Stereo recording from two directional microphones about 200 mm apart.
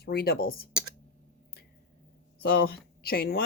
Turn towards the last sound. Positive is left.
turn(degrees=50)  # may be behind; listen again after turning